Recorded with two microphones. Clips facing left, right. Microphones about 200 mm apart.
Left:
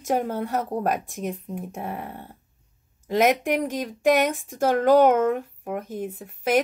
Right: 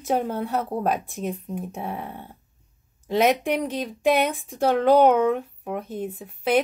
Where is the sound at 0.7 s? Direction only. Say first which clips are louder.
Even; 5° right (ahead or behind).